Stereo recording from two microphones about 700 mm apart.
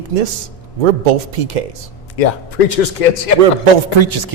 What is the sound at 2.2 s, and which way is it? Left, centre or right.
Speech, left.